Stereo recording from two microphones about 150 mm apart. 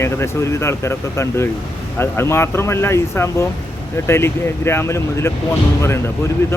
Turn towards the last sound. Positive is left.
turn(degrees=15)  # may be behind; listen again after turning